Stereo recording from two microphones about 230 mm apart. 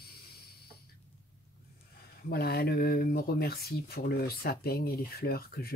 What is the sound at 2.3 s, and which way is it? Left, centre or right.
Speech, left.